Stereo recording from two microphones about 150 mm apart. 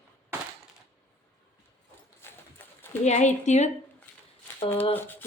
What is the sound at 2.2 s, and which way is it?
Clip-clop, 15° left (ahead or behind).